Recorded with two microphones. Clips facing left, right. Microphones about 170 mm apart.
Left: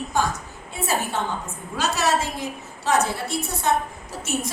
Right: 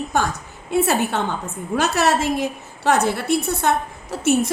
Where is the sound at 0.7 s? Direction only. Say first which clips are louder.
Right 7 dB; 70° right (ahead or behind).